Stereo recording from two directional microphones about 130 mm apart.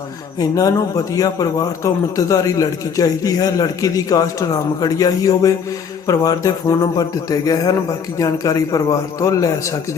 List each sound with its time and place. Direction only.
0.3 s a man's voice: 25° left (ahead or behind)